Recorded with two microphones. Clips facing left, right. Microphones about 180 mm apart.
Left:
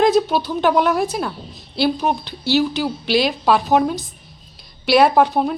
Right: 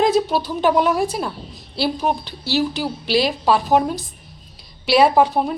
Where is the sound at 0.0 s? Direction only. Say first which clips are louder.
Left 2 dB; 5° right (ahead or behind).